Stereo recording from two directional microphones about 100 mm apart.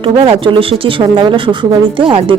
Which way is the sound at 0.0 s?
60° right (ahead or behind).